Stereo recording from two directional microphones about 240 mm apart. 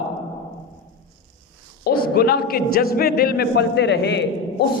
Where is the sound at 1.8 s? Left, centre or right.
Left.